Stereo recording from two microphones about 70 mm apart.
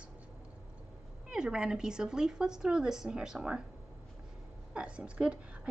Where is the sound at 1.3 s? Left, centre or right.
Centre.